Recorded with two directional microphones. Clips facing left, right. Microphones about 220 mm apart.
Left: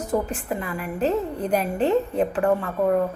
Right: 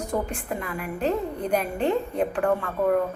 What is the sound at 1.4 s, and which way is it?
Speech, 35° left (ahead or behind).